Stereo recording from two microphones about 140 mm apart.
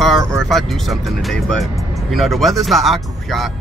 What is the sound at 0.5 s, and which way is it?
Speech, centre (ahead or behind).